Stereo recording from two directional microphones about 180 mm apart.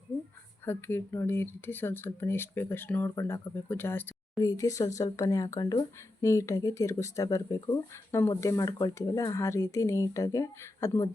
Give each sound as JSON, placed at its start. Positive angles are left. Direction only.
{"t": 0.6, "sound": "speech", "side_deg": 10}